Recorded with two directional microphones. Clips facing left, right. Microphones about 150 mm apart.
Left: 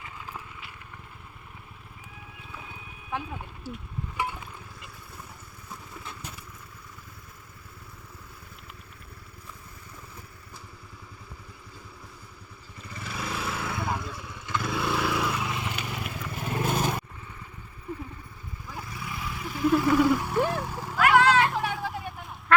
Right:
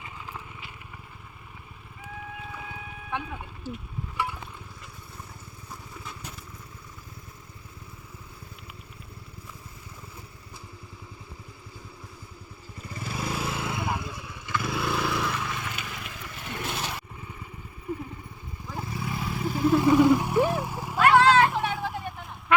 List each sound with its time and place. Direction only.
3.1 s speech: centre (ahead or behind)
12.8 s vehicle: 40° right (ahead or behind); by 13.8 s 25° right (ahead or behind)
13.8 s vehicle: 10° right (ahead or behind); by 15.7 s 15° left (ahead or behind)
15.7 s vehicle: 35° left (ahead or behind)
17.9 s vehicle: 10° right (ahead or behind)
18.8 s vehicle: 30° right (ahead or behind); by 20.9 s 10° right (ahead or behind)
20.9 s vehicle: 30° right (ahead or behind)
21.5 s a sound: centre (ahead or behind)